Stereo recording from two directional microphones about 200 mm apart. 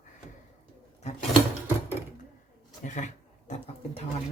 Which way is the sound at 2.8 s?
40° left (ahead or behind).